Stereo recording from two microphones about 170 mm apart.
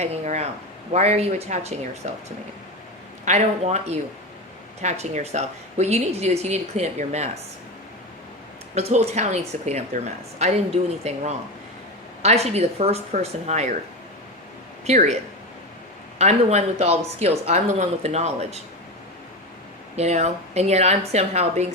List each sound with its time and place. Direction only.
0.0 s speech: 40° right (ahead or behind)
3.2 s speech: 40° right (ahead or behind)
8.7 s speech: 40° right (ahead or behind)
14.8 s speech: 40° right (ahead or behind)
16.1 s speech: 40° right (ahead or behind)
20.0 s speech: 40° right (ahead or behind)